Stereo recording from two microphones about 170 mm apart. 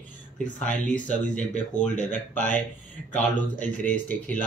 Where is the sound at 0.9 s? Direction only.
5° left (ahead or behind).